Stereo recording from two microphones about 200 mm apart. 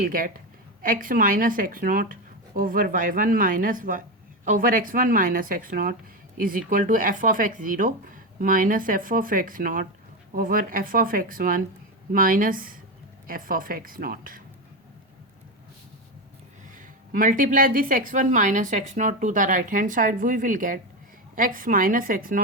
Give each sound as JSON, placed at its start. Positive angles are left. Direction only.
{"t": 0.0, "sound": "speech", "side_deg": -45}
{"t": 16.7, "sound": "a woman's voice", "side_deg": -40}